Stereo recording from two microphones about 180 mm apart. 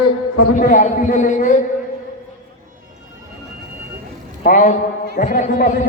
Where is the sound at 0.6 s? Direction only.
45° left (ahead or behind).